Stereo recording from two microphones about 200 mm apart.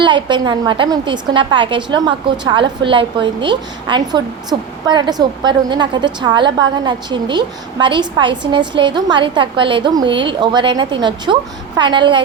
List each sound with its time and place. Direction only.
0.0 s a woman's voice: 25° right (ahead or behind)